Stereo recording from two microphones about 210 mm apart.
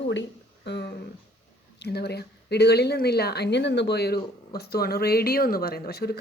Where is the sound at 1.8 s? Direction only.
50° left (ahead or behind).